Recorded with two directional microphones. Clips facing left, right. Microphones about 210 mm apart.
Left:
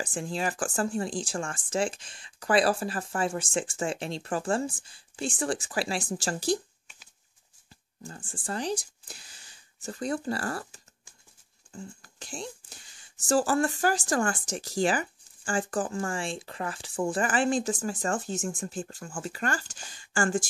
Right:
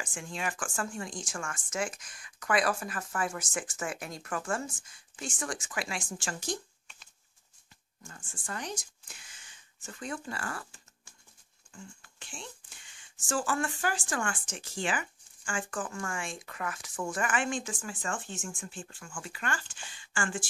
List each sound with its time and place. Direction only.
0.0 s speech: 35° left (ahead or behind)
8.0 s speech: 35° left (ahead or behind)